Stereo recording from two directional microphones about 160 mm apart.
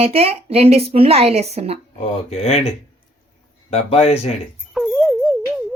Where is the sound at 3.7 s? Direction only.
40° left (ahead or behind).